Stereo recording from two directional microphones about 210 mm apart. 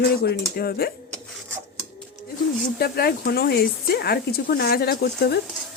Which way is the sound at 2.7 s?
45° left (ahead or behind).